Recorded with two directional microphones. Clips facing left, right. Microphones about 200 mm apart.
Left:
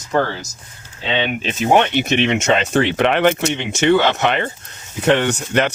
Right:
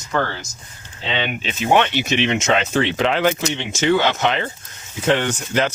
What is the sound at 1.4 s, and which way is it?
Speech, 45° left (ahead or behind).